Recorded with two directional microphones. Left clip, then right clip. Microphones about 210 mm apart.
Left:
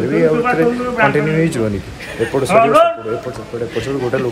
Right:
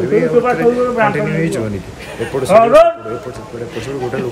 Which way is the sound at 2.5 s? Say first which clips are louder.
Right 3 dB; 50° right (ahead or behind).